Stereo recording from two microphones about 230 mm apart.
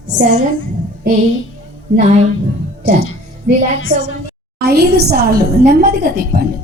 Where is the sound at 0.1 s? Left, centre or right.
Right.